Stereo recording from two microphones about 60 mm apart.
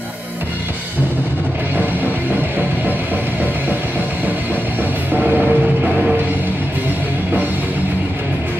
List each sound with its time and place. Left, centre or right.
5.1 s vehicle: right